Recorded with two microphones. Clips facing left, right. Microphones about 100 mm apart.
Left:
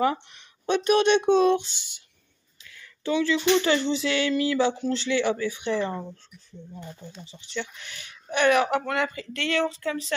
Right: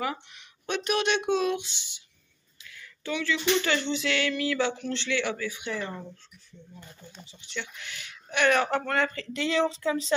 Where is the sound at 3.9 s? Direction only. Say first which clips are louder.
Left 4 dB; 30° left (ahead or behind).